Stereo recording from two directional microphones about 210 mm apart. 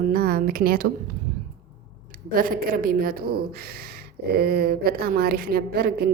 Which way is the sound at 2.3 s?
40° right (ahead or behind).